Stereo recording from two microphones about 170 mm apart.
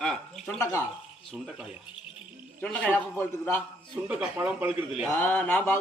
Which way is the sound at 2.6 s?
5° left (ahead or behind).